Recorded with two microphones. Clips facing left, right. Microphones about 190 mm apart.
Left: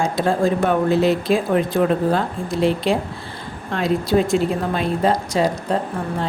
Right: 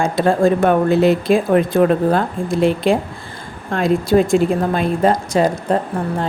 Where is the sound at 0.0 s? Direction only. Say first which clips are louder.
Right 4 dB; 55° right (ahead or behind).